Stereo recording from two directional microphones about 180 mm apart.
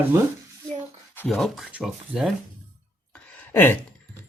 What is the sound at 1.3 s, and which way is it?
Speech, centre (ahead or behind).